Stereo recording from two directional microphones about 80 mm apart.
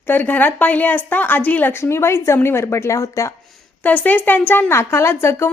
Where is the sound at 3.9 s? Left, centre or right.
Left.